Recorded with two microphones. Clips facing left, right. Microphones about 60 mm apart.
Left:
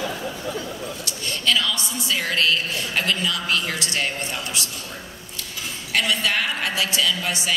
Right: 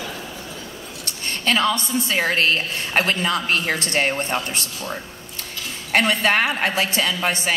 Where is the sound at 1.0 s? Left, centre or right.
Right.